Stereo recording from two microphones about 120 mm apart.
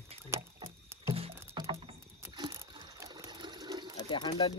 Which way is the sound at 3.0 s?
25° right (ahead or behind).